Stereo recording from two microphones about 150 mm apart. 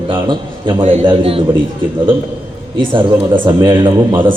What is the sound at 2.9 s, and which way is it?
A man's voice, 35° right (ahead or behind).